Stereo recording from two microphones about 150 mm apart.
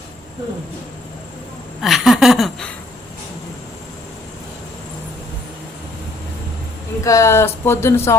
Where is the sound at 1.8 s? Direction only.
Centre (ahead or behind).